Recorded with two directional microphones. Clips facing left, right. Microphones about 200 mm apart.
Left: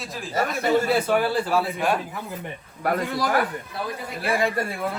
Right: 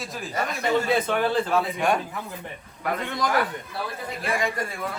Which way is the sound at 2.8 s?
45° left (ahead or behind).